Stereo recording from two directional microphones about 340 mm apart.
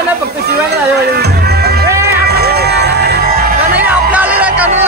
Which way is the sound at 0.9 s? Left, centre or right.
Right.